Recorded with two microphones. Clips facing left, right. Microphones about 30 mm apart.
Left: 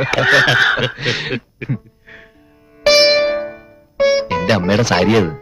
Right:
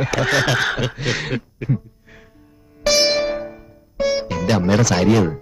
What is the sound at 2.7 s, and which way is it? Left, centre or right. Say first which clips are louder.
Music: left 6 dB; left.